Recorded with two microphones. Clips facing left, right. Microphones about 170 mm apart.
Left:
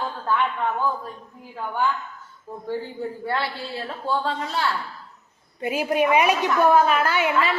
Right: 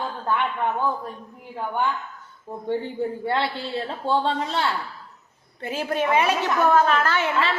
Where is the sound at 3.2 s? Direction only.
25° right (ahead or behind).